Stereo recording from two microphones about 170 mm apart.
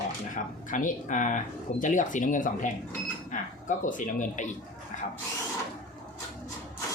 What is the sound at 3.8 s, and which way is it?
Speech, 50° left (ahead or behind).